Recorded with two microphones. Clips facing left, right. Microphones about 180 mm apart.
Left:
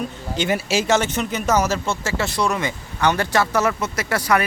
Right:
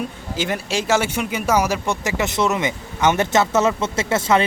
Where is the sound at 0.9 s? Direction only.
10° right (ahead or behind).